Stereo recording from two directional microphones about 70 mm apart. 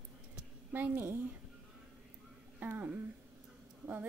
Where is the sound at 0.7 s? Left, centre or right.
Right.